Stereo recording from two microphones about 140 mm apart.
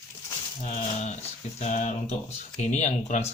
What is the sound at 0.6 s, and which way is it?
Speech, 55° left (ahead or behind).